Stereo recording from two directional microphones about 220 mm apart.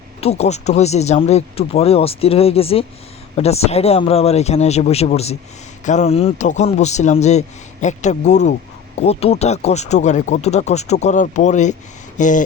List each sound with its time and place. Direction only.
0.2 s speech: 30° left (ahead or behind)